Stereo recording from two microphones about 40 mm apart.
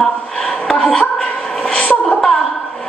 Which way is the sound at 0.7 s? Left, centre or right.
Left.